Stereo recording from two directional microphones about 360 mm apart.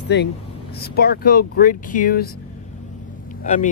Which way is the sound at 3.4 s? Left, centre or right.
Left.